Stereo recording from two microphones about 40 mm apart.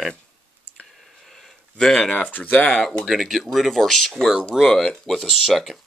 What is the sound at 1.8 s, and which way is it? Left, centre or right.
Speech, centre.